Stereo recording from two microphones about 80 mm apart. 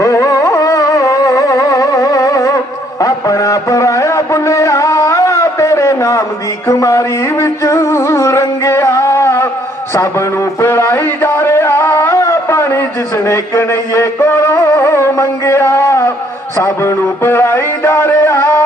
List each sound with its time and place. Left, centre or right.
0.0 s music: left
9.9 s a sound: left
13.2 s music: left